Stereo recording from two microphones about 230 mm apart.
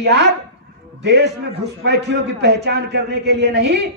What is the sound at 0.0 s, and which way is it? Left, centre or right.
A man's voice, right.